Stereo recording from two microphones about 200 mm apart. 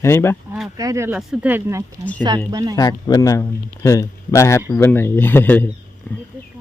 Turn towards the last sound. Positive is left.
turn(degrees=10)  # may be behind; listen again after turning